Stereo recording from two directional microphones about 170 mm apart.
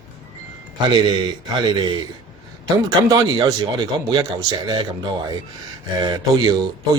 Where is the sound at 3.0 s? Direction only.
25° right (ahead or behind).